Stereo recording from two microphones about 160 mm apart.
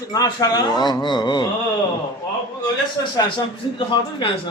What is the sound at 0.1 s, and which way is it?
Speech, 25° left (ahead or behind).